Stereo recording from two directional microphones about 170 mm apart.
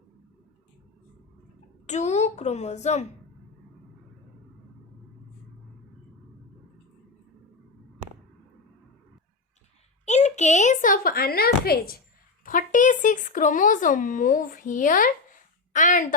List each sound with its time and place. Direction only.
1.9 s a woman's voice: 40° left (ahead or behind)
10.1 s a woman's voice: 40° left (ahead or behind); by 11.9 s 65° left (ahead or behind)
12.5 s speech: 50° left (ahead or behind)